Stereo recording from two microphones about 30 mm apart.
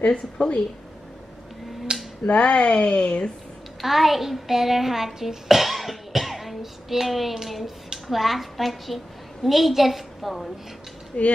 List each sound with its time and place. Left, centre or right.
0.0 s speech: left
1.9 s finger snapping: right
2.2 s speech: left
3.8 s a child's voice: centre
11.1 s speech: left